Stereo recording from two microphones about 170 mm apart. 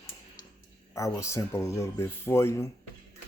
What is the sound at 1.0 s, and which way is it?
Speech, 15° left (ahead or behind).